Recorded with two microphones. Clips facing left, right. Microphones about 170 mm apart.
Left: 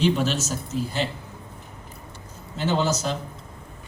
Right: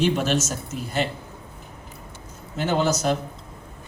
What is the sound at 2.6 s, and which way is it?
Speech, 55° right (ahead or behind).